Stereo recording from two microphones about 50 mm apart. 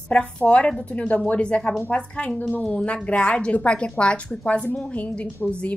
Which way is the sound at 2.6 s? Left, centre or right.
Centre.